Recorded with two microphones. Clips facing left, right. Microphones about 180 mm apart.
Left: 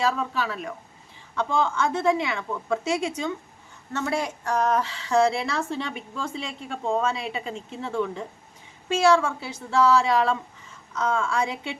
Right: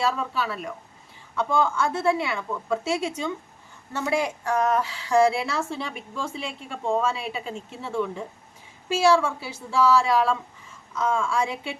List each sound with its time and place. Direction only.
0.1 s a woman's voice: 5° right (ahead or behind)